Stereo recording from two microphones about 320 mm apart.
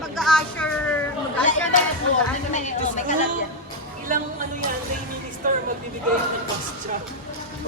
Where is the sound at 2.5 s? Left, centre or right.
Left.